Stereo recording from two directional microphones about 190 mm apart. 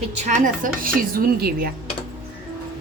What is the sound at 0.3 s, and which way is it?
Speech, 40° right (ahead or behind).